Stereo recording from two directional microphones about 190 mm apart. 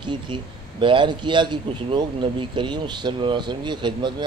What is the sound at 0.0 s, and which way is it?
Speech, 25° right (ahead or behind).